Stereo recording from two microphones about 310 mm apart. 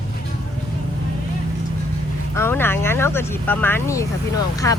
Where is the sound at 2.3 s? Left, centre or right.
Centre.